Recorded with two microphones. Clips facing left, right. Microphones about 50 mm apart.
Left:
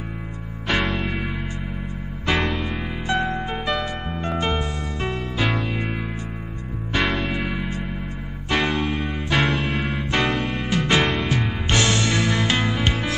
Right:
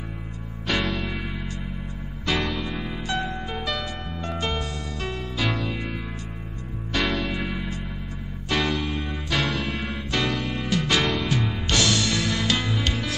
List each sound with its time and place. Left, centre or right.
0.7 s music: left
2.2 s music: left